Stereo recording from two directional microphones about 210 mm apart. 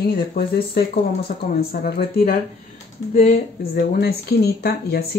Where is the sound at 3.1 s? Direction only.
30° left (ahead or behind).